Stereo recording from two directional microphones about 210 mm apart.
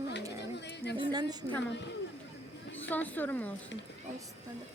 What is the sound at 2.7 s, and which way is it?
Speech, 10° left (ahead or behind).